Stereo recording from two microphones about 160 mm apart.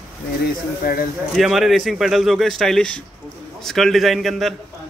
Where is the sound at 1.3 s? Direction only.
Centre (ahead or behind).